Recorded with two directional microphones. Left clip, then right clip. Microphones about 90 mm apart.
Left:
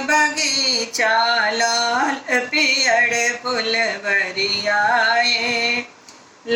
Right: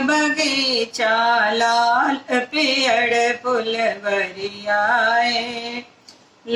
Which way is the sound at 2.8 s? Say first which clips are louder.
Even; 20° right (ahead or behind).